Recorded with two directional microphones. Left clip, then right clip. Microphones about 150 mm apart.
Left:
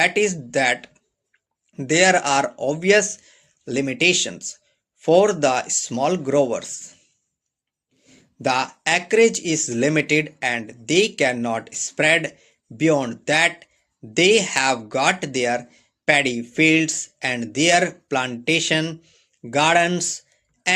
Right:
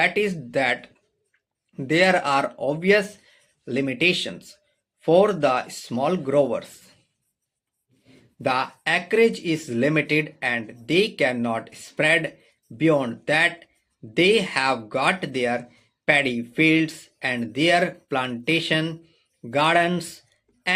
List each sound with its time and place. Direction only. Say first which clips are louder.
0.0 s speech: left 3 dB; 30° left (ahead or behind)
8.0 s speech: left 2 dB; 30° left (ahead or behind)